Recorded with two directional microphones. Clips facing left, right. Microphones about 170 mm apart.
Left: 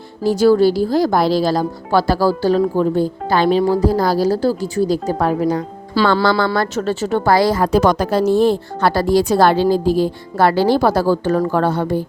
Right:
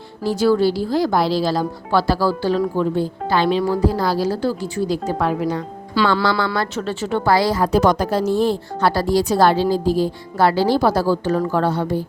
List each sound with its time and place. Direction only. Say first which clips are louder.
0.3 s speech: left 4 dB; 40° left (ahead or behind)
7.7 s a woman's voice: left 2 dB; 80° left; by 11.9 s 50° left (ahead or behind)